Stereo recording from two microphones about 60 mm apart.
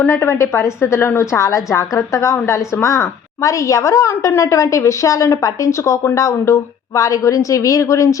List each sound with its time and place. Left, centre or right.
0.1 s a woman's voice: left